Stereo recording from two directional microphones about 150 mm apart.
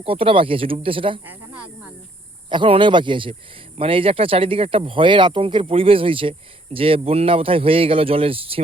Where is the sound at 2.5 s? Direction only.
35° right (ahead or behind).